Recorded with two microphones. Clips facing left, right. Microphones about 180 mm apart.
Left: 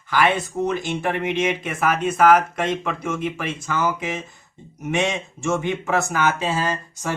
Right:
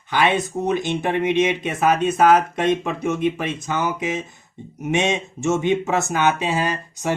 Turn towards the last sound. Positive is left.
turn(degrees=-20)  # may be behind; listen again after turning